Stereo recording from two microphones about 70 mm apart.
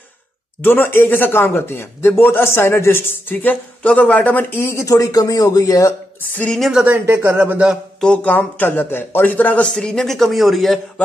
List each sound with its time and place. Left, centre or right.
0.6 s speech: left
3.8 s speech: centre
4.6 s speech: left
6.3 s speech: centre
6.9 s speech: right
8.0 s speech: centre